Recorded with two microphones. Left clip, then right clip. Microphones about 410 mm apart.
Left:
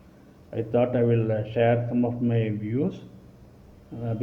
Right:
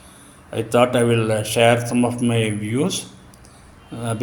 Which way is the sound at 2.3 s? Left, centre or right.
Left.